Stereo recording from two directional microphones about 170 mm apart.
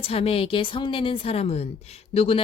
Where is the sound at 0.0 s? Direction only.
35° left (ahead or behind).